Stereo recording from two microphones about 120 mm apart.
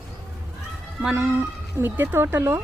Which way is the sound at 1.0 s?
15° right (ahead or behind).